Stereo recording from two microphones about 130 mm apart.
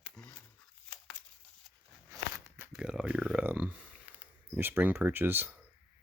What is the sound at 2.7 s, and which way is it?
Speech, 5° right (ahead or behind).